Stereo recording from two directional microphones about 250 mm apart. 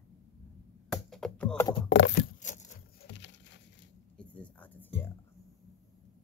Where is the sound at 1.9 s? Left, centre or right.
Left.